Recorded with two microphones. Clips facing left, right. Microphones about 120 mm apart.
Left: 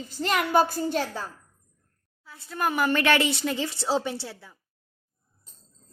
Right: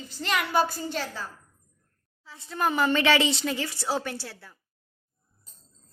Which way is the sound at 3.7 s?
25° left (ahead or behind).